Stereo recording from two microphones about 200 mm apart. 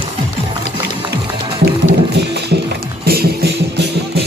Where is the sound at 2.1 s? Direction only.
55° right (ahead or behind).